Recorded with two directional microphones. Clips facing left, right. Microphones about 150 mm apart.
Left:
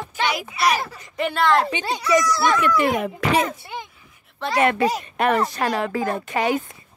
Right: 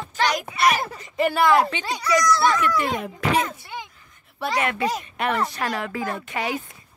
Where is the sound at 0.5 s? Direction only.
Centre (ahead or behind).